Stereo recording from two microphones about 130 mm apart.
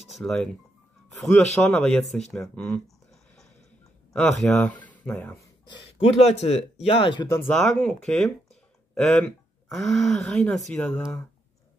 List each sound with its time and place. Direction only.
0.0 s a man's voice: centre (ahead or behind)
4.1 s speech: 5° left (ahead or behind)
5.1 s speech: 20° left (ahead or behind)
5.9 s speech: 55° left (ahead or behind)
7.2 s speech: 20° left (ahead or behind)
7.5 s a man's voice: 5° left (ahead or behind)